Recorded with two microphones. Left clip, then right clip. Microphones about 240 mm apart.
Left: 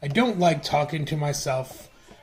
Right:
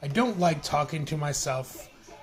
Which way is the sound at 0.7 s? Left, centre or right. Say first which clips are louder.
Left 3 dB; right.